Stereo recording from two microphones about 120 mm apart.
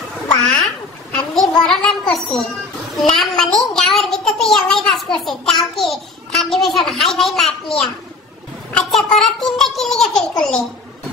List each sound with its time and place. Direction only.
0.4 s cat: 5° left (ahead or behind)
1.1 s a sound: 5° left (ahead or behind)
3.0 s a child's voice: 5° left (ahead or behind)